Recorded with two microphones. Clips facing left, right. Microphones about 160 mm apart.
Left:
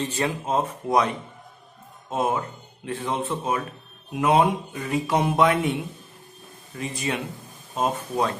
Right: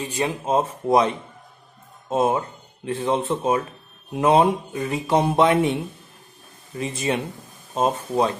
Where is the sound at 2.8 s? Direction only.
25° right (ahead or behind).